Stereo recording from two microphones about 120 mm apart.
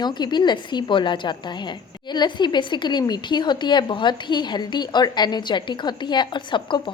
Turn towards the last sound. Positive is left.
turn(degrees=40)  # may be behind; listen again after turning